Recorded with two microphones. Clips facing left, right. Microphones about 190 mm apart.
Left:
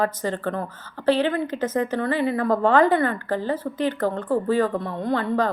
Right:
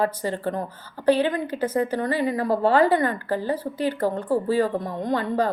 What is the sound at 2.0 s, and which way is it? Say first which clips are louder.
Speech: left 1 dB; 40° right (ahead or behind).